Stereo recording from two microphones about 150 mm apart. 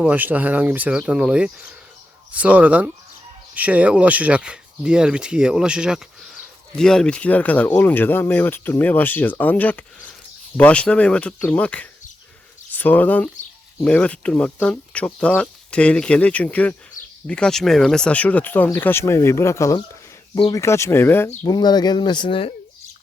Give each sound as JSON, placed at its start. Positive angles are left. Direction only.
{"t": 0.0, "sound": "speech", "side_deg": -10}
{"t": 21.4, "sound": "speech", "side_deg": 25}